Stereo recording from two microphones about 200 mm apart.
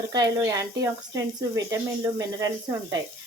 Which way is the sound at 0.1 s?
15° right (ahead or behind).